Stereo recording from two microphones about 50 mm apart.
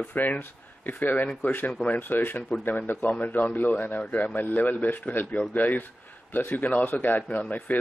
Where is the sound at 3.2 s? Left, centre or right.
Left.